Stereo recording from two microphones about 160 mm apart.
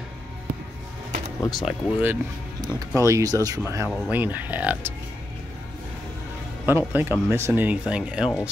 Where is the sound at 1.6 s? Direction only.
10° right (ahead or behind).